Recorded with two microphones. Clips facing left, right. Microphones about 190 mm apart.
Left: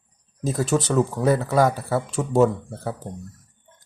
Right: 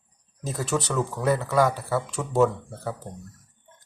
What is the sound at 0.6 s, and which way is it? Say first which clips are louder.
Speech: left 5 dB; 40° left (ahead or behind).